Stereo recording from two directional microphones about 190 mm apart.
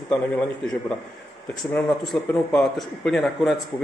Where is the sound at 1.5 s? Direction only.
5° left (ahead or behind).